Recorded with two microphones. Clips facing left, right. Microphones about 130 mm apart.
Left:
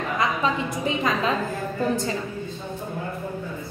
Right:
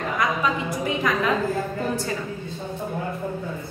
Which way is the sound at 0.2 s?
25° left (ahead or behind).